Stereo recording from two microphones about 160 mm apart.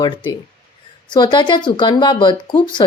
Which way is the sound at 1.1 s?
30° left (ahead or behind).